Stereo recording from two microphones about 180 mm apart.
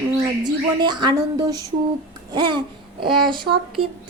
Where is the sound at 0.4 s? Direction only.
25° right (ahead or behind).